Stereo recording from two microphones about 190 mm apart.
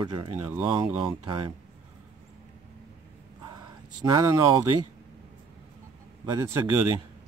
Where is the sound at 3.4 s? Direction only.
20° right (ahead or behind).